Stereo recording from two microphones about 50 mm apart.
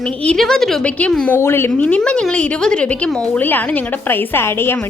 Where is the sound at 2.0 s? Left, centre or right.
Centre.